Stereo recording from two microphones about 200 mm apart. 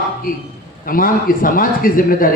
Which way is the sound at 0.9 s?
45° left (ahead or behind).